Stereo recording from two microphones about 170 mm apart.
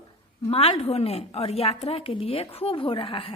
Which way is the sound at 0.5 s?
35° left (ahead or behind).